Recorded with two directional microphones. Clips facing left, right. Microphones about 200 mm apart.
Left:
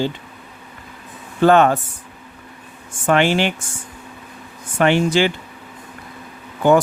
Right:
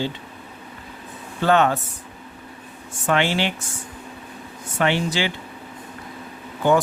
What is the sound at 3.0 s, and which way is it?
Speech, 50° left (ahead or behind).